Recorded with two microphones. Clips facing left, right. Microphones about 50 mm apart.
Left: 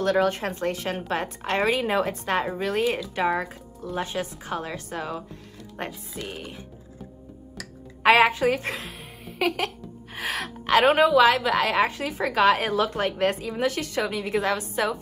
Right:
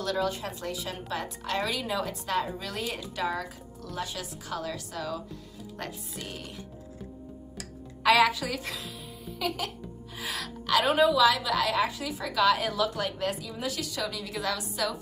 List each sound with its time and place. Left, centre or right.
0.0 s a woman's voice: left
6.1 s music: centre
8.0 s a woman's voice: left